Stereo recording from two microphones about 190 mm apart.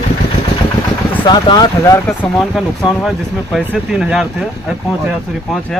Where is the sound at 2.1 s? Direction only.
5° left (ahead or behind).